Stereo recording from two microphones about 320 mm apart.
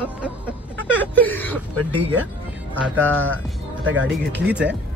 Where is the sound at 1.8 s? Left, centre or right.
Right.